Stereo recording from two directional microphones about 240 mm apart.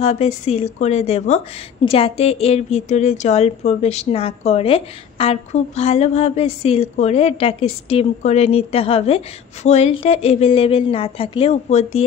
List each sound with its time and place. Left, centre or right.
0.0 s a woman's voice: left